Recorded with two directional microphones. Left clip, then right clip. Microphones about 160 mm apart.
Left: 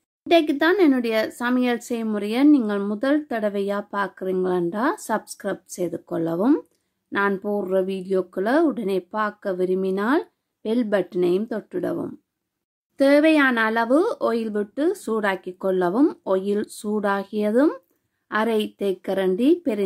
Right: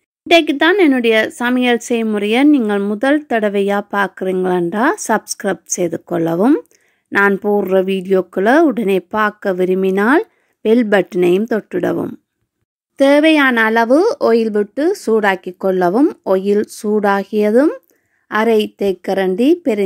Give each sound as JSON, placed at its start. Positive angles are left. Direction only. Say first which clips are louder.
{"t": 0.3, "sound": "speech", "louder": "right 7 dB", "side_deg": -30}
{"t": 12.9, "sound": "speech", "louder": "right 6 dB", "side_deg": -30}